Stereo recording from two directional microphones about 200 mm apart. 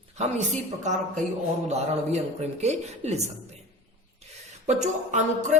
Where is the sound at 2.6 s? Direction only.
35° right (ahead or behind).